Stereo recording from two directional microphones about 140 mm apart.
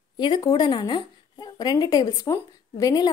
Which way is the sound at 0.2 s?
30° left (ahead or behind).